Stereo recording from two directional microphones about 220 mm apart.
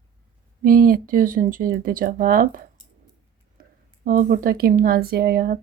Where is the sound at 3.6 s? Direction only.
40° right (ahead or behind).